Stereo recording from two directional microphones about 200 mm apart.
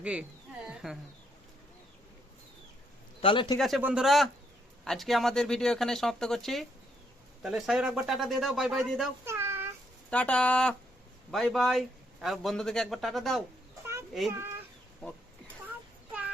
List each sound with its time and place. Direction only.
0.0 s speech: 5° right (ahead or behind)
0.7 s a sound: centre (ahead or behind)
3.2 s speech: 25° left (ahead or behind)
3.6 s a man's voice: 5° right (ahead or behind)
9.2 s child singing: 10° right (ahead or behind)
10.1 s a man's voice: 5° left (ahead or behind)
14.3 s speech: 10° right (ahead or behind)